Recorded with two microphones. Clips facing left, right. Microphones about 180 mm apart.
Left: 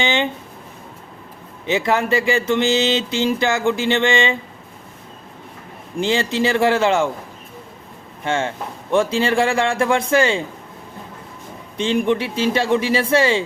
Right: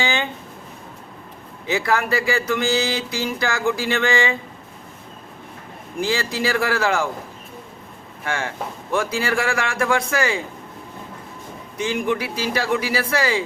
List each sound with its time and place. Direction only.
0.0 s a sound: 20° left (ahead or behind)
1.6 s speech: 25° left (ahead or behind)
6.0 s speech: 25° left (ahead or behind)
8.2 s speech: 25° left (ahead or behind)
11.8 s speech: 25° left (ahead or behind)